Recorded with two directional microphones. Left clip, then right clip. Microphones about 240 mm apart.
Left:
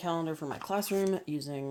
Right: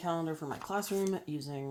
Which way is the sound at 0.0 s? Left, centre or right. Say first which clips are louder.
Left 2 dB; left.